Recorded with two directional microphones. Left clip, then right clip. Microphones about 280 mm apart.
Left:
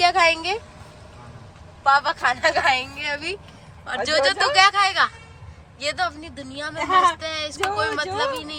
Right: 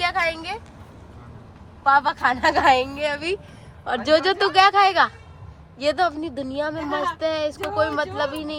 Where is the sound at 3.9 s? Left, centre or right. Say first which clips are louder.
Right 1 dB; centre.